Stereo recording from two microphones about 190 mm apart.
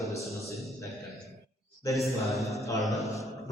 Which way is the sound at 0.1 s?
15° left (ahead or behind).